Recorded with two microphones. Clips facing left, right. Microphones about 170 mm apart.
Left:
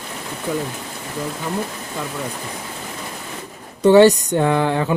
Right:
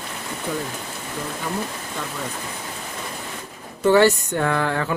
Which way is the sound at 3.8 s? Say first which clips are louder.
Left 5 dB; 20° left (ahead or behind).